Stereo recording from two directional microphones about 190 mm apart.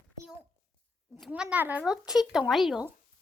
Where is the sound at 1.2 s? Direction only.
5° right (ahead or behind).